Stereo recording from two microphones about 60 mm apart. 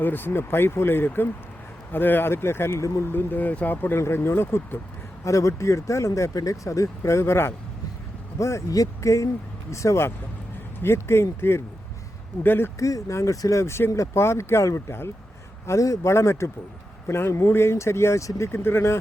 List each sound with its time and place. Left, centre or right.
0.0 s speech: left
5.2 s speech: left
9.7 s speech: left
12.8 s speech: left
13.6 s speech: left